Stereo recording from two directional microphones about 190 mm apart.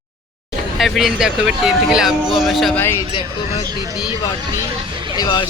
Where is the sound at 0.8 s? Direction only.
Centre (ahead or behind).